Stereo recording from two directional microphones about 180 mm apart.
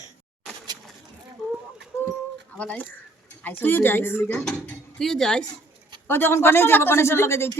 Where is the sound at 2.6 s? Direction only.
10° left (ahead or behind).